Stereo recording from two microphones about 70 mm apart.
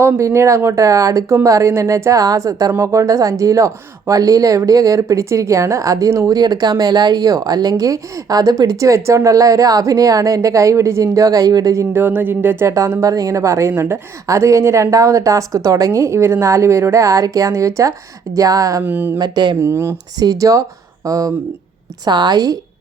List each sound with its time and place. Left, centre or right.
0.0 s a woman's voice: right
6.3 s a woman's voice: right
11.9 s speech: right
12.6 s a woman's voice: right
18.8 s speech: right
19.2 s speech: right
19.6 s speech: right
20.1 s speech: right
22.0 s a woman's voice: right